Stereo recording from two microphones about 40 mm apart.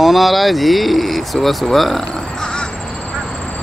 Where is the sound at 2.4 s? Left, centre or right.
Centre.